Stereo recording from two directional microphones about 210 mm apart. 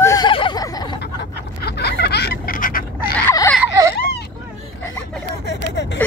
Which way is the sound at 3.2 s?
15° left (ahead or behind).